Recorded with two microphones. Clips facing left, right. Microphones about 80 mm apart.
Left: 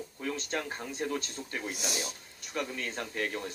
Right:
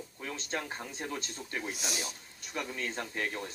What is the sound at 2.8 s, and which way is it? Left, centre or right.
Speech, right.